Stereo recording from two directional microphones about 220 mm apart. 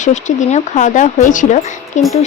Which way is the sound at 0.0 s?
35° left (ahead or behind).